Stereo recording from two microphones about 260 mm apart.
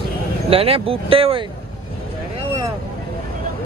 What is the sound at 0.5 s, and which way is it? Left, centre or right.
Speech, right.